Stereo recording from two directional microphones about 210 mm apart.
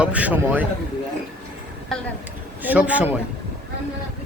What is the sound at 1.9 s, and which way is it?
A man's voice, centre (ahead or behind).